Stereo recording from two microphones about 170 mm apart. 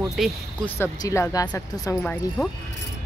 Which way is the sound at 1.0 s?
20° left (ahead or behind).